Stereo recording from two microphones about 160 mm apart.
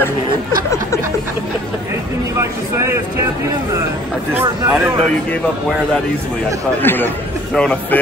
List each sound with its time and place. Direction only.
2.3 s vehicle: 15° right (ahead or behind)
4.3 s speech: 15° right (ahead or behind)
6.8 s speech: 10° left (ahead or behind)